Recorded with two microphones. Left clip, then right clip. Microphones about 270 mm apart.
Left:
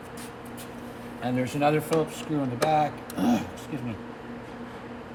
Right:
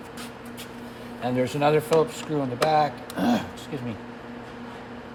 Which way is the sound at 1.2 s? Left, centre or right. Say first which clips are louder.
Right 2 dB; right.